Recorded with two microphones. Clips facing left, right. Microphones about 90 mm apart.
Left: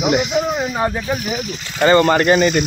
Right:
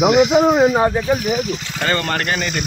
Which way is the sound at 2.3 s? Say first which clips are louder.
Left 9 dB; 25° left (ahead or behind).